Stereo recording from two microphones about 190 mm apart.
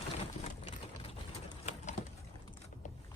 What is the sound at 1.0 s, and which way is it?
Vehicle, 35° left (ahead or behind).